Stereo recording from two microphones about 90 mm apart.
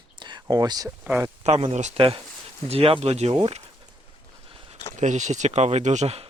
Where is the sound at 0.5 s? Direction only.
45° right (ahead or behind).